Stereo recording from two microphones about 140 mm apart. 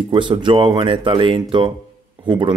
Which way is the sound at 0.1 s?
35° right (ahead or behind).